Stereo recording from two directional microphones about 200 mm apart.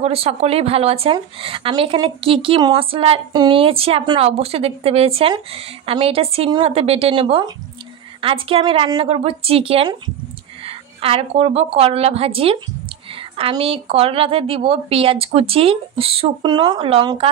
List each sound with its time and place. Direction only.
0.0 s a woman's voice: 30° right (ahead or behind)